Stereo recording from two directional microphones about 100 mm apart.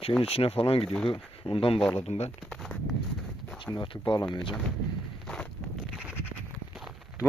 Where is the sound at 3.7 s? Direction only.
55° left (ahead or behind).